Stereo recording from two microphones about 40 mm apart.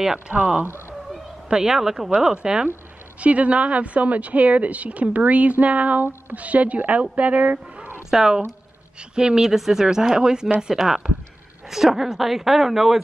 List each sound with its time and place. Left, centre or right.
0.3 s a woman's voice: right
1.5 s a woman's voice: centre
3.2 s speech: right
8.1 s a woman's voice: centre
10.8 s a woman's voice: centre